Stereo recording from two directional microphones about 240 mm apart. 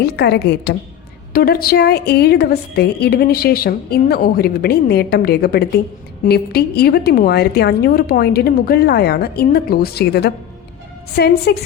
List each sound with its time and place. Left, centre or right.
0.0 s a woman's voice: left